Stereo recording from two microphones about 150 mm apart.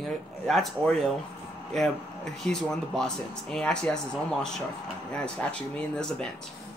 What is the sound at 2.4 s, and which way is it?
Speech, 5° left (ahead or behind).